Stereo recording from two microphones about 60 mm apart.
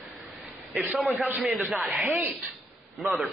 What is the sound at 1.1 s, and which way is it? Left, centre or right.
Speech, right.